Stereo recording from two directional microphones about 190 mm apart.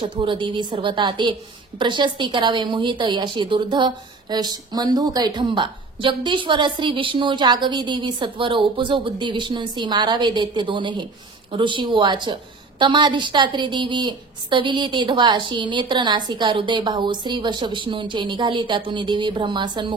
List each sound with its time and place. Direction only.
0.0 s a woman's voice: 25° right (ahead or behind)